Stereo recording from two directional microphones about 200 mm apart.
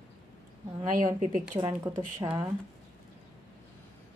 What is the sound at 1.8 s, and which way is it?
Speech, 20° right (ahead or behind).